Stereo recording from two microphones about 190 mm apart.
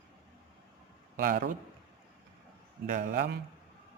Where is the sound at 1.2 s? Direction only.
45° right (ahead or behind).